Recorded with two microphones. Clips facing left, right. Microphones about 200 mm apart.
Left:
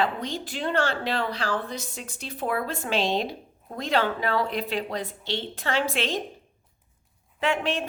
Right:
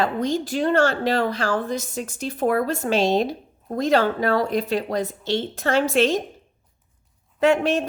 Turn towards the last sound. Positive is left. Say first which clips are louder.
# right 8 dB
turn(degrees=-45)  # may be behind; listen again after turning